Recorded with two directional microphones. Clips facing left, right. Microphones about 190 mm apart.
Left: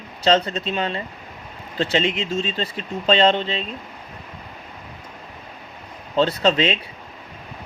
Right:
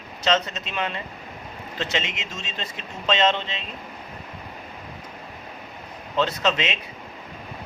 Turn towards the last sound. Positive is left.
turn(degrees=30)  # may be behind; listen again after turning